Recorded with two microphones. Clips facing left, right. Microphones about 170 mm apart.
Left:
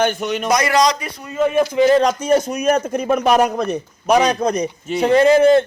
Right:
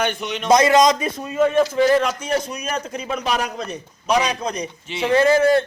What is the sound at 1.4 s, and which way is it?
Speech, 10° left (ahead or behind).